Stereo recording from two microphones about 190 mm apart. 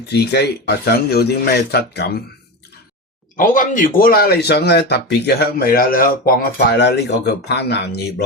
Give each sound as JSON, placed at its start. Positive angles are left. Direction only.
{"t": 0.1, "sound": "speech", "side_deg": 60}
{"t": 3.3, "sound": "speech", "side_deg": 45}